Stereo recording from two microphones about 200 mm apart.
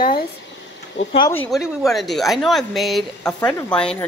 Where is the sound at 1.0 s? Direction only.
65° left (ahead or behind).